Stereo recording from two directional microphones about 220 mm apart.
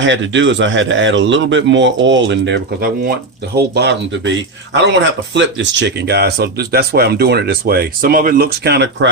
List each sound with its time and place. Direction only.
0.0 s a man's voice: 55° right (ahead or behind)